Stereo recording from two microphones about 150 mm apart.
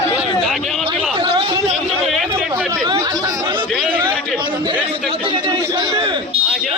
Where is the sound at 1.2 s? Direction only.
35° right (ahead or behind).